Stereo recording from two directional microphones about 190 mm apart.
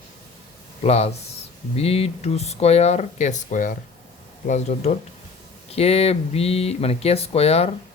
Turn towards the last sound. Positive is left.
turn(degrees=35)  # may be behind; listen again after turning